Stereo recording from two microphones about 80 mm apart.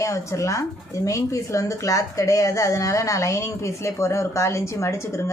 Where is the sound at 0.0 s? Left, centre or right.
Left.